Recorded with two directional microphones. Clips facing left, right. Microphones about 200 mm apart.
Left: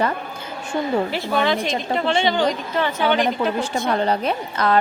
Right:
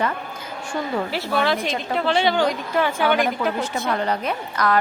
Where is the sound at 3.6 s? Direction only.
30° left (ahead or behind).